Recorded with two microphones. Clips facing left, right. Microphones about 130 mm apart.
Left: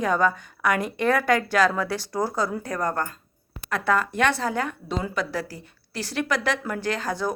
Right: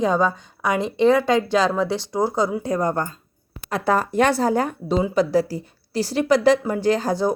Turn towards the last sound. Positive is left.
turn(degrees=-30)  # may be behind; listen again after turning